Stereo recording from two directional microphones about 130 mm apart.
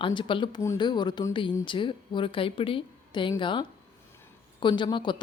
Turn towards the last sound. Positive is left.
turn(degrees=35)  # may be behind; listen again after turning